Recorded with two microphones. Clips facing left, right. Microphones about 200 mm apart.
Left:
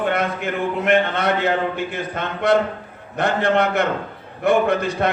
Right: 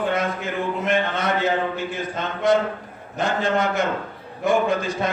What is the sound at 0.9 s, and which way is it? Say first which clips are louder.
A man's voice: left 5 dB; 65° left (ahead or behind).